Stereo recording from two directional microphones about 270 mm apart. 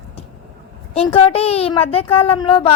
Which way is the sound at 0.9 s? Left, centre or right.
Left.